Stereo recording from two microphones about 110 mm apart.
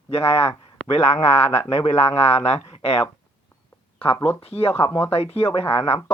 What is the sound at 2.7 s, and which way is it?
Speech, 60° left (ahead or behind).